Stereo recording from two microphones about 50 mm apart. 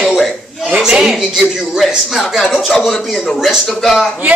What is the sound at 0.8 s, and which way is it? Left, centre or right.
Speech, centre.